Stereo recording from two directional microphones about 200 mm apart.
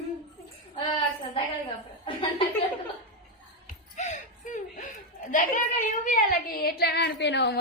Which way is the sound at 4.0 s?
35° left (ahead or behind).